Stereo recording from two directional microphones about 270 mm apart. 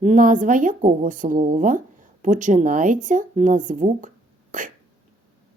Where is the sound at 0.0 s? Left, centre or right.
Right.